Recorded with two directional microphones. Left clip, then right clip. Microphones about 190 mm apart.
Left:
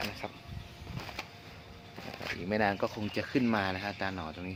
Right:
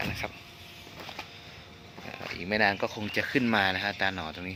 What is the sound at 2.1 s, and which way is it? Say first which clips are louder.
Speech: right 3 dB; 10° left (ahead or behind).